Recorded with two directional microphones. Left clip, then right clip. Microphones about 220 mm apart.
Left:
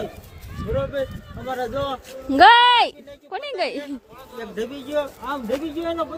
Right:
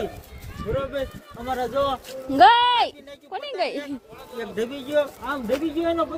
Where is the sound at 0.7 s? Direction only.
5° right (ahead or behind).